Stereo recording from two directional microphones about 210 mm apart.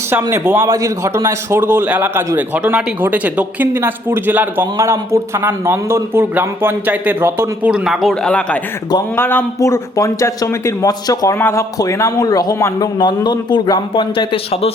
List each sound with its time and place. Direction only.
0.1 s a man's voice: 10° right (ahead or behind); by 14.7 s 25° left (ahead or behind)